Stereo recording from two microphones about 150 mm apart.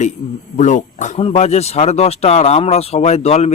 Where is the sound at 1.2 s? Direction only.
45° left (ahead or behind).